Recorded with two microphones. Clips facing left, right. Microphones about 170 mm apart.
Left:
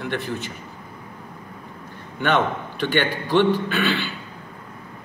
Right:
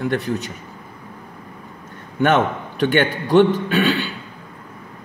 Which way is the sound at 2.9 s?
45° right (ahead or behind).